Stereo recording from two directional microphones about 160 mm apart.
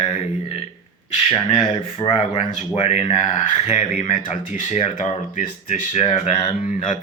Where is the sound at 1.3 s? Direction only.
30° left (ahead or behind).